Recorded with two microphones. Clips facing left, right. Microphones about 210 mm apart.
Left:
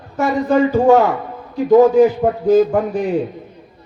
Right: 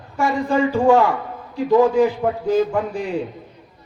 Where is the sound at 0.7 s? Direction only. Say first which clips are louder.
Left 2 dB; 20° left (ahead or behind).